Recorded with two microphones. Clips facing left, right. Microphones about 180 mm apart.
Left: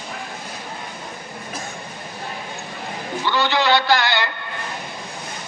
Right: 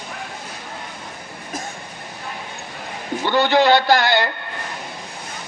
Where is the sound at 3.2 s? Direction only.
50° right (ahead or behind).